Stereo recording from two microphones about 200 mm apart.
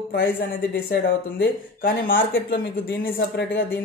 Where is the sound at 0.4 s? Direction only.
50° left (ahead or behind).